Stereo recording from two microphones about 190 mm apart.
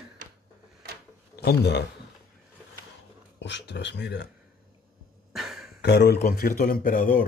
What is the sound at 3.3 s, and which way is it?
Speech, 65° left (ahead or behind).